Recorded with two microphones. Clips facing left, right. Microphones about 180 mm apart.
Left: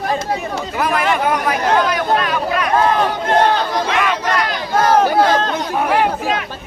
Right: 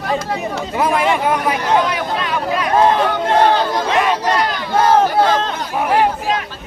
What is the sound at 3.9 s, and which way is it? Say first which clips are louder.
Speech: right 4 dB; 30° right (ahead or behind).